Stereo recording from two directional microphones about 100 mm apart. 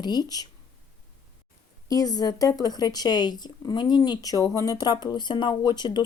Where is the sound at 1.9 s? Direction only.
40° left (ahead or behind).